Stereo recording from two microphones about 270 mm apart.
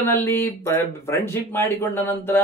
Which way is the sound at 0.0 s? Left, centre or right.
Centre.